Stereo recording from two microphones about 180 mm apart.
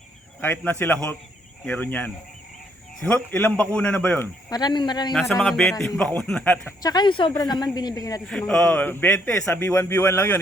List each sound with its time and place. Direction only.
0.4 s a man's voice: 10° left (ahead or behind)
4.4 s a woman's voice: 20° left (ahead or behind)
5.4 s speech: centre (ahead or behind)
6.8 s a woman's voice: 25° left (ahead or behind)
8.3 s a man's voice: 5° left (ahead or behind)